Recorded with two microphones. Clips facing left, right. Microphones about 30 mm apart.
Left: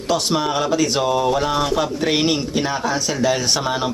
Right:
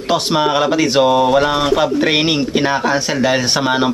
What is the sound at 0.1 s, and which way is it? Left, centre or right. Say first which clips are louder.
Speech: right 5 dB; right.